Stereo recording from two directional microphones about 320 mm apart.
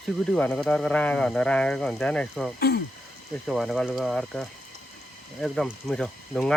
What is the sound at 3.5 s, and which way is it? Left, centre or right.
Speech, centre.